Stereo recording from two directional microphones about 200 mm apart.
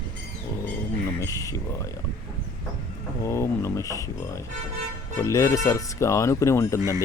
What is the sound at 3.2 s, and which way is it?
Speech, 15° left (ahead or behind).